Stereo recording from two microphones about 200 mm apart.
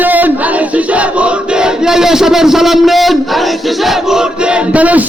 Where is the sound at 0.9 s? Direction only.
5° right (ahead or behind).